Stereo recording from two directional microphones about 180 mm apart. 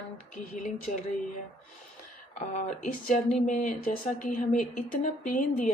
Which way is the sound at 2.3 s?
45° left (ahead or behind).